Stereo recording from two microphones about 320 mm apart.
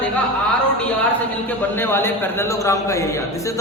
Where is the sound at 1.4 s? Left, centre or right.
Centre.